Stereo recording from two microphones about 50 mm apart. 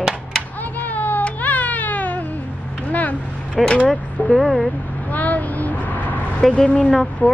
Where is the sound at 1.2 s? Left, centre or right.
Left.